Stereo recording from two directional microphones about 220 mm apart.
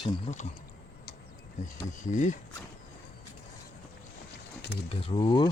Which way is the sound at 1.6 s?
35° left (ahead or behind).